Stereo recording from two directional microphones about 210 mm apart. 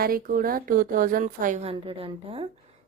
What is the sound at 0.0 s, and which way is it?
A woman's voice, 45° right (ahead or behind).